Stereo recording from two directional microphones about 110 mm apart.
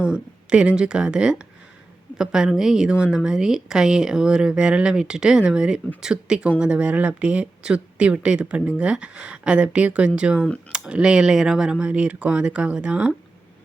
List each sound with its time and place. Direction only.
0.0 s speech: 10° right (ahead or behind)